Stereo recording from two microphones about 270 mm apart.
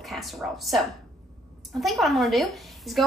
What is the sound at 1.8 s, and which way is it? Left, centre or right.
A woman's voice, centre.